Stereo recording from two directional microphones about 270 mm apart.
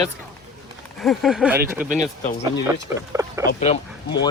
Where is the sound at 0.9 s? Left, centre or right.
Centre.